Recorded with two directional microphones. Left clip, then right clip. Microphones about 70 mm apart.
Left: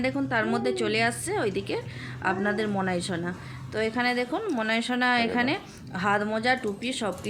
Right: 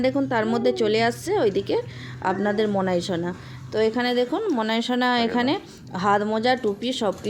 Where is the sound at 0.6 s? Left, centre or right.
Right.